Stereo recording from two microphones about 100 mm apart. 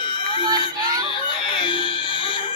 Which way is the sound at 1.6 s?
55° left (ahead or behind).